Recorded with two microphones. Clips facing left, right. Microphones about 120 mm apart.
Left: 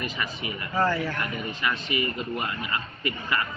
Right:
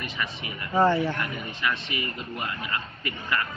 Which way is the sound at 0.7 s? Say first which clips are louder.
Right 4 dB; 25° right (ahead or behind).